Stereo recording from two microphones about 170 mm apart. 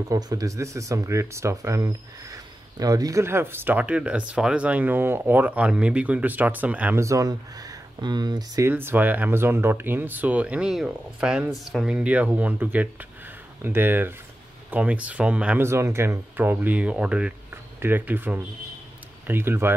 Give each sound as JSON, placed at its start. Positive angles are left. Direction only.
{"t": 0.1, "sound": "speech", "side_deg": -20}